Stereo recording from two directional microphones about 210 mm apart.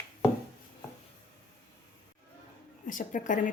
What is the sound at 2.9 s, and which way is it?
Speech, 40° left (ahead or behind).